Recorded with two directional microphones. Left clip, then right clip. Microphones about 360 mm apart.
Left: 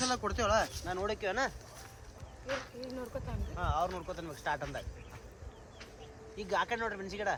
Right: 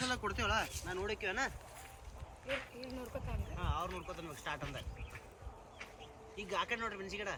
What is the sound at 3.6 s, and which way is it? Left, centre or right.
Speech, centre.